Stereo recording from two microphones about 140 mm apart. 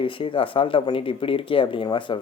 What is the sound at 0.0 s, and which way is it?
Speech, 40° left (ahead or behind).